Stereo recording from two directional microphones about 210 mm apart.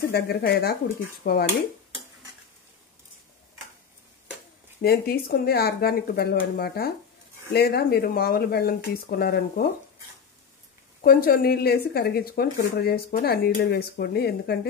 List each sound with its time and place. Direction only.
0.1 s speech: 50° left (ahead or behind)
4.8 s speech: 45° left (ahead or behind)
11.0 s speech: 45° left (ahead or behind)